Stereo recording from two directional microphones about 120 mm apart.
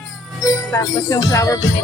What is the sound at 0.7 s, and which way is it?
Speech, 25° left (ahead or behind).